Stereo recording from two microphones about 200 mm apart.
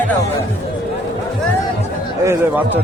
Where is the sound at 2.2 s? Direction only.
15° right (ahead or behind).